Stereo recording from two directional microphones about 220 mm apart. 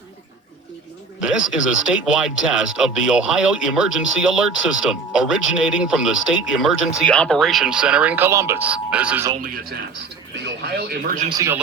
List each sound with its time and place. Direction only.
1.2 s speech: 5° right (ahead or behind)
9.4 s a man's voice: 40° right (ahead or behind)
11.3 s speech: 15° right (ahead or behind)